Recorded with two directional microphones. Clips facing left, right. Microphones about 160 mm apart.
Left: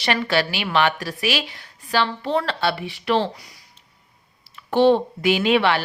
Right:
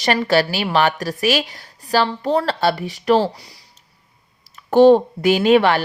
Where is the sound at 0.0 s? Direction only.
40° right (ahead or behind).